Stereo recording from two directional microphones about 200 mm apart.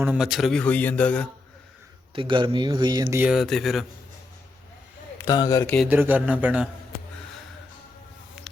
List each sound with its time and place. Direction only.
0.0 s a man's voice: 5° right (ahead or behind)
2.1 s speech: 25° right (ahead or behind)
3.2 s a man's voice: centre (ahead or behind)
5.1 s speech: 15° left (ahead or behind)
5.7 s speech: 5° right (ahead or behind)